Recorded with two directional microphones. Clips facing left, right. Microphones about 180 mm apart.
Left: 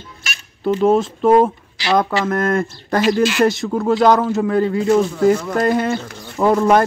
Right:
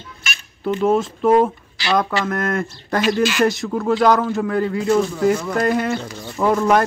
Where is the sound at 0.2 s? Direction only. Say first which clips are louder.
Left 3 dB; 35° left (ahead or behind).